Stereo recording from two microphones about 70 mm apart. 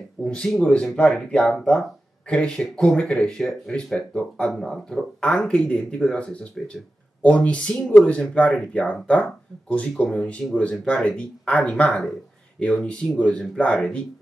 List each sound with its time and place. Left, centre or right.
0.2 s speech: centre